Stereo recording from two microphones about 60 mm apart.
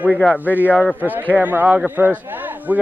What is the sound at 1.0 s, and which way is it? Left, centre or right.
Speech, right.